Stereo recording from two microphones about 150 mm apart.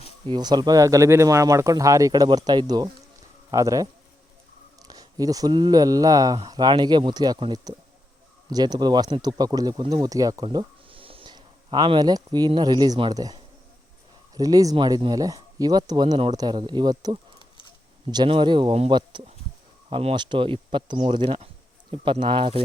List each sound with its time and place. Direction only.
0.3 s speech: 30° right (ahead or behind)
4.9 s speech: 25° right (ahead or behind)